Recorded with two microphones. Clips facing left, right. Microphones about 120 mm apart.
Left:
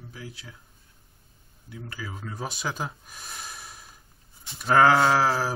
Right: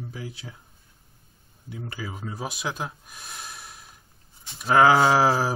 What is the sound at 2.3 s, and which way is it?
Speech, 5° right (ahead or behind).